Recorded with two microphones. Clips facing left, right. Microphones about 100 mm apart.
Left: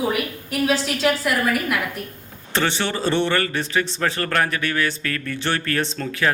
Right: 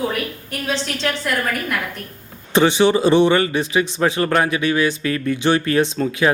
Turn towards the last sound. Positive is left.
turn(degrees=-15)  # may be behind; listen again after turning